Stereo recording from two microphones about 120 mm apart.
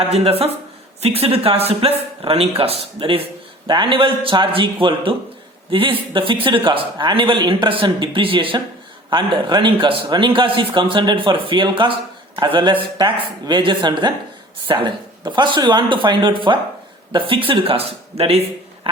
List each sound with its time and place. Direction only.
0.1 s a man's voice: 55° right (ahead or behind)
18.2 s speech: 60° right (ahead or behind)